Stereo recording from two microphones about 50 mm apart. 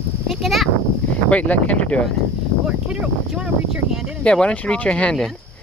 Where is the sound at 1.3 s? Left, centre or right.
Left.